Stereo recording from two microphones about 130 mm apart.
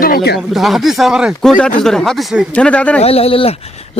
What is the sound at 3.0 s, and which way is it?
Speech, 50° left (ahead or behind).